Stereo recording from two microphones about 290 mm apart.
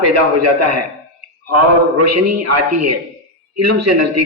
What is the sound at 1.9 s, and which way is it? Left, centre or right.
A man's voice, right.